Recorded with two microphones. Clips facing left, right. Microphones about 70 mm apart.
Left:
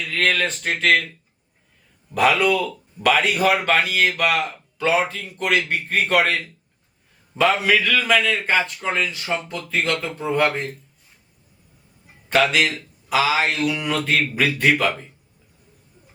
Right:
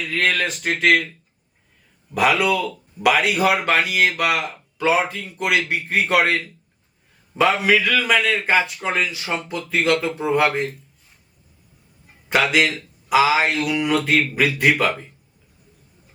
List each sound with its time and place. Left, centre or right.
0.1 s a man's voice: centre
2.1 s a man's voice: centre
12.3 s a man's voice: centre